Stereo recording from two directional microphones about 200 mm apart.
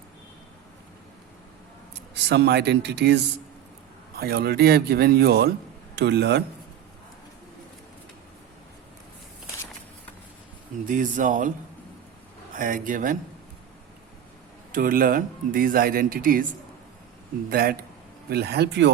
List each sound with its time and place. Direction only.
2.1 s speech: 60° right (ahead or behind)
4.2 s speech: 50° right (ahead or behind)
10.8 s speech: 40° right (ahead or behind)
12.5 s speech: 40° right (ahead or behind)
14.7 s speech: 45° right (ahead or behind)
17.5 s speech: 45° right (ahead or behind)